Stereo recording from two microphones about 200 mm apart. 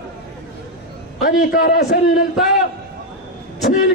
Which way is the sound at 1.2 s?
45° left (ahead or behind).